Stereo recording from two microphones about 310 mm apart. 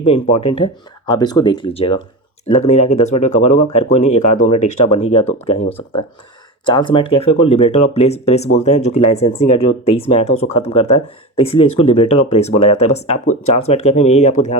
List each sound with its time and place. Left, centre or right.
0.0 s speech: centre
6.7 s speech: centre